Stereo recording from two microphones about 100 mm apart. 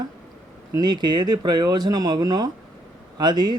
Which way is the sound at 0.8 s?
45° right (ahead or behind).